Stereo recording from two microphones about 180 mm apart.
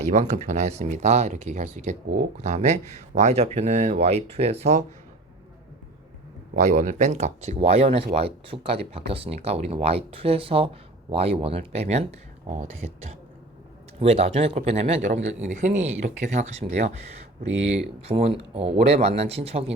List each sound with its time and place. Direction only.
0.1 s speech: 40° right (ahead or behind)
6.6 s speech: 40° right (ahead or behind)